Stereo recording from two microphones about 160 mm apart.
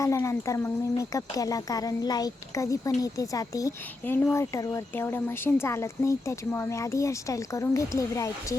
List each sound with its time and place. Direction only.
0.0 s speech: 20° left (ahead or behind)